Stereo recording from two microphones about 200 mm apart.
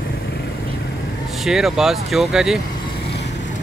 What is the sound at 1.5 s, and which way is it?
Speech, centre (ahead or behind).